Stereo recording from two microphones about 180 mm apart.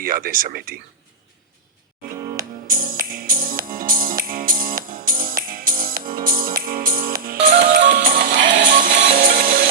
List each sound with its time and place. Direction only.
0.0 s speech: 50° right (ahead or behind)
2.1 s music: 15° right (ahead or behind)
2.6 s music: 50° right (ahead or behind)